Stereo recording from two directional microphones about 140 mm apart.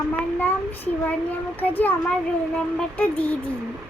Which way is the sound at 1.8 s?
10° left (ahead or behind).